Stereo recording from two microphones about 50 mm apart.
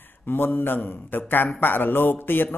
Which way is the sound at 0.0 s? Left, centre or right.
Left.